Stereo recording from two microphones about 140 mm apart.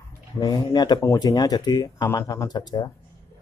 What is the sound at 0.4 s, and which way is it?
Speech, 30° left (ahead or behind).